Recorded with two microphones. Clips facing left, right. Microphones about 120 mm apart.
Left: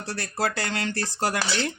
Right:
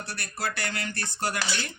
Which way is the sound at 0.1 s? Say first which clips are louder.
Left 7 dB; 90° left.